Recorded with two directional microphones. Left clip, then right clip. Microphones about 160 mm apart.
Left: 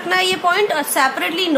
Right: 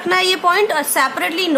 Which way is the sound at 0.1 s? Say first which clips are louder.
Right 2 dB; 25° right (ahead or behind).